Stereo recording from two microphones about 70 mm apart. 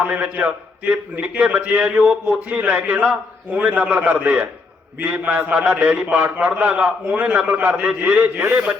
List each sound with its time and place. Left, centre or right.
0.0 s a man's voice: right